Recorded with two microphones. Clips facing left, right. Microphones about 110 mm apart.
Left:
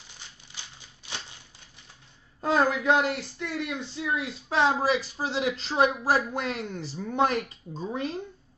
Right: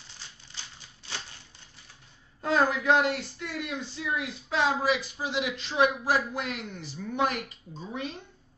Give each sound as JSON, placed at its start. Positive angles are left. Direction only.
{"t": 1.0, "sound": "a sound", "side_deg": 15}
{"t": 2.4, "sound": "speech", "side_deg": 20}
{"t": 3.0, "sound": "speech", "side_deg": -25}
{"t": 3.5, "sound": "speech", "side_deg": 25}